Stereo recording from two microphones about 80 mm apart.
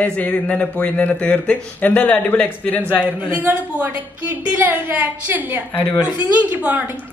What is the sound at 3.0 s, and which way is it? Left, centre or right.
A child's voice, centre.